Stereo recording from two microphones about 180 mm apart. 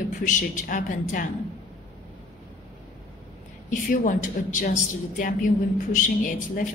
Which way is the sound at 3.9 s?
45° left (ahead or behind).